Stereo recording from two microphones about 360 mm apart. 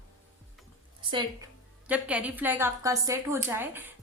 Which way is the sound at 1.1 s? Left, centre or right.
Centre.